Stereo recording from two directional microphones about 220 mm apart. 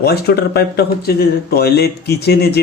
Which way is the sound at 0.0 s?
45° left (ahead or behind).